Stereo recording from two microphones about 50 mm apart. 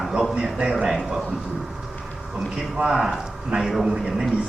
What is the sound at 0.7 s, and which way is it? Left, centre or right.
Speech, centre.